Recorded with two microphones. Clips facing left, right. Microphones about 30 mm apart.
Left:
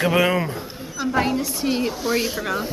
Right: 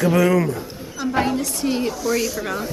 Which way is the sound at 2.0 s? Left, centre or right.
Left.